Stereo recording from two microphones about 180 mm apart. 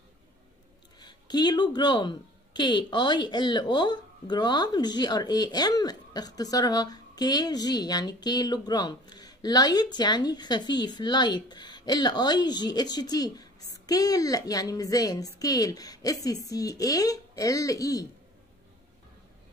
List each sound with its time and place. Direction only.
0.9 s speech: 25° left (ahead or behind)